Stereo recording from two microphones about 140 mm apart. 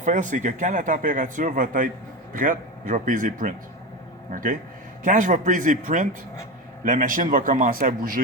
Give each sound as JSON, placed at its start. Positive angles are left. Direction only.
{"t": 0.0, "sound": "speech", "side_deg": -65}